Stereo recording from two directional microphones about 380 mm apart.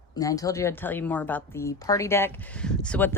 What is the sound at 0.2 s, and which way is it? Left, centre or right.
A woman's voice, centre.